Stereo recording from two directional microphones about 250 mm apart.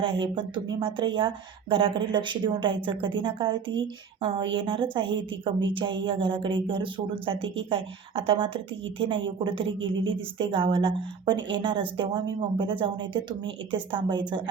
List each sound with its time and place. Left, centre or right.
0.0 s a woman's voice: centre